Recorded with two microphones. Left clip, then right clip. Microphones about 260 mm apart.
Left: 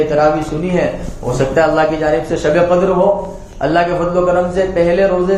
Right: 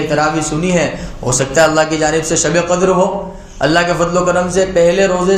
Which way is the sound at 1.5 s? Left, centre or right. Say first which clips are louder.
Right 1 dB; right.